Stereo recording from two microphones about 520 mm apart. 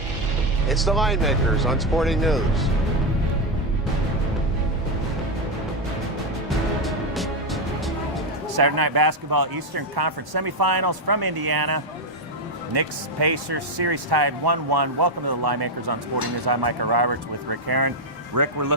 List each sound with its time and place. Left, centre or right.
0.7 s speech: centre
6.8 s music: centre
8.5 s speech: right